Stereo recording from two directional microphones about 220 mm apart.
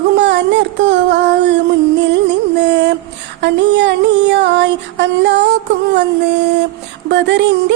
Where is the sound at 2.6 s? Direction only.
50° right (ahead or behind).